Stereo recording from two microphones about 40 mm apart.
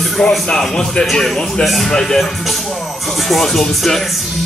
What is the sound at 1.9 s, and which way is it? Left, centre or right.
Music, centre.